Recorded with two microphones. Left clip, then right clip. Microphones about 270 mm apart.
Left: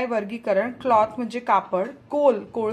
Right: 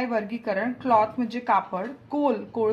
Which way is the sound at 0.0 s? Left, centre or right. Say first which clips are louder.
Left 2 dB; left.